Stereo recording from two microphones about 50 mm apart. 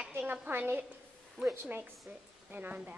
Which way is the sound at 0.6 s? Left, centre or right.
Right.